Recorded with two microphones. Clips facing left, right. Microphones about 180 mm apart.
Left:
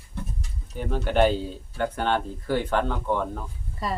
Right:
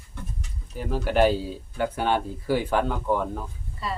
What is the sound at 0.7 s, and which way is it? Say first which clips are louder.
Speech: even; 5° right (ahead or behind).